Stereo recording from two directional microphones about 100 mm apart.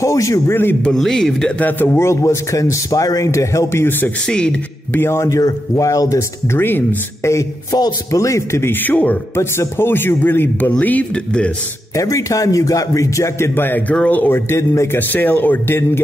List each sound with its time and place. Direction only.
0.0 s a man's voice: 35° left (ahead or behind)
0.8 s speech: 5° left (ahead or behind)
1.7 s a man's voice: 20° left (ahead or behind)
4.3 s speech: 10° left (ahead or behind)
4.9 s a man's voice: 25° left (ahead or behind)
11.9 s a man's voice: 30° left (ahead or behind)